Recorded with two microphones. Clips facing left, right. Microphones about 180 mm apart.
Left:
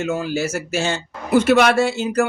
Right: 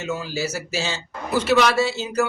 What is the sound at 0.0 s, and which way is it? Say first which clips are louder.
A man's voice: left 5 dB; 50° left (ahead or behind).